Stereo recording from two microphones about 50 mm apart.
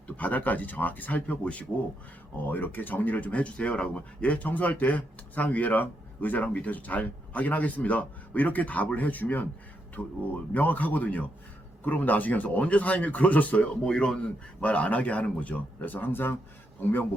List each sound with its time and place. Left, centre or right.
0.2 s speech: left
13.8 s speech: centre; by 16.3 s left